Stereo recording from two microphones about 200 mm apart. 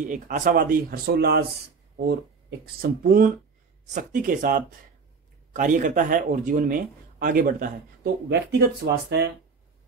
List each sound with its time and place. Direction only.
0.1 s speech: 40° right (ahead or behind)
2.6 s speech: 45° right (ahead or behind)